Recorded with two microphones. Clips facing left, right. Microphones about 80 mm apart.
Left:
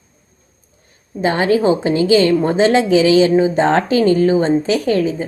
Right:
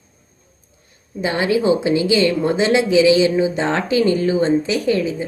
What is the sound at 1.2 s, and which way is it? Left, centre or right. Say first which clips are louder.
Speech: left 4 dB; left.